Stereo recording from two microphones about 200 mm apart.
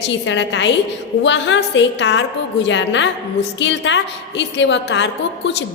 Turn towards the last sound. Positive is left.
turn(degrees=60)  # may be behind; listen again after turning